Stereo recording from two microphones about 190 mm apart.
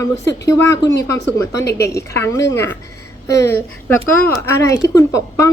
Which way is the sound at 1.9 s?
15° left (ahead or behind).